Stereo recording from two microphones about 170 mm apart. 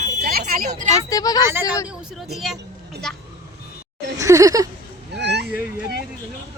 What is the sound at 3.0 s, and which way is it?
Speech, 5° left (ahead or behind).